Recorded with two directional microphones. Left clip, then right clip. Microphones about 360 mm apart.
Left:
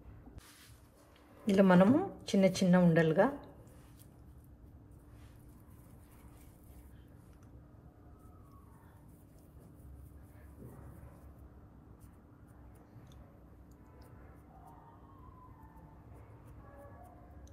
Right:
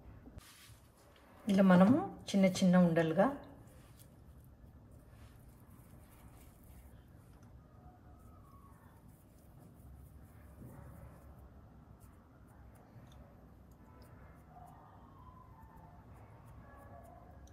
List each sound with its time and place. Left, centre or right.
1.4 s a woman's voice: centre